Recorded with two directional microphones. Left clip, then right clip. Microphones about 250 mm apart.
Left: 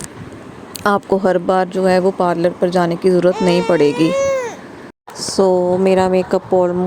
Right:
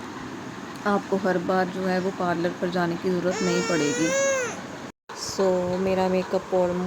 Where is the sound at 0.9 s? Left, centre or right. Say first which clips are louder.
Left 10 dB; left.